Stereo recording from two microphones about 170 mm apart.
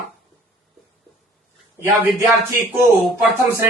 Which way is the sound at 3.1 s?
15° right (ahead or behind).